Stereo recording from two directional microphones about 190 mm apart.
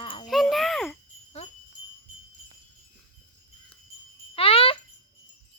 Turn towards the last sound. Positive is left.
turn(degrees=30)  # may be behind; listen again after turning